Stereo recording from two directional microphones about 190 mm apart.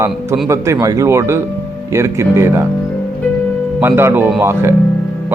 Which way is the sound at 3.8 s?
15° right (ahead or behind).